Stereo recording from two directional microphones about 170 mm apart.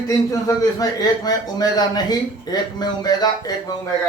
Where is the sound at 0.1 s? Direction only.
20° left (ahead or behind).